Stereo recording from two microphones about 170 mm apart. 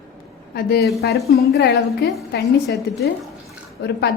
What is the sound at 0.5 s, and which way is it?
A woman's voice, 70° left (ahead or behind).